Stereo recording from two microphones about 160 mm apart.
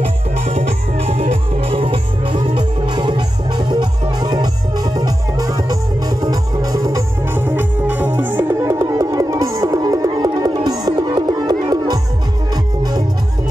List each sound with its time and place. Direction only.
0.0 s music: 40° right (ahead or behind); by 12.0 s 25° right (ahead or behind)